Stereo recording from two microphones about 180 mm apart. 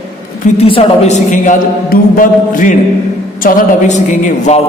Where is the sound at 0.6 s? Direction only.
35° left (ahead or behind).